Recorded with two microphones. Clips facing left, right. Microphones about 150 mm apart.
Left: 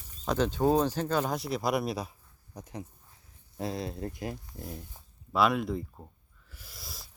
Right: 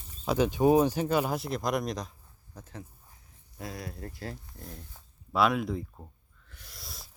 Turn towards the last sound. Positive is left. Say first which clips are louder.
# even
turn(degrees=0)  # may be behind; listen again after turning